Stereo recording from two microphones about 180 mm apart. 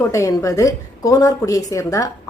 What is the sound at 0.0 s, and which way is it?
A woman's voice, 15° left (ahead or behind).